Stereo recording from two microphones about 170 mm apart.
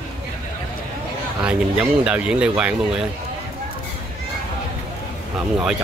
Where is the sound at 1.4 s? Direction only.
5° right (ahead or behind).